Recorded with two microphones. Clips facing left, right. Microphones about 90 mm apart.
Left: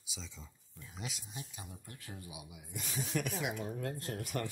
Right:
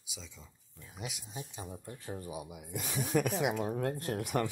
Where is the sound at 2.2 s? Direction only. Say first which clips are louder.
Right 8 dB; 50° right (ahead or behind).